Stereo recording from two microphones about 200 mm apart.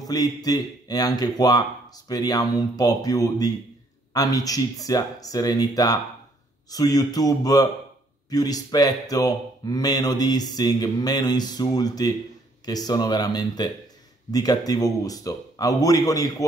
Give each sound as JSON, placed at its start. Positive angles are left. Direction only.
{"t": 0.0, "sound": "speech", "side_deg": 20}